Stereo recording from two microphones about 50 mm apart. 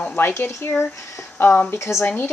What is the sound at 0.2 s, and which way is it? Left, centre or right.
A woman's voice, left.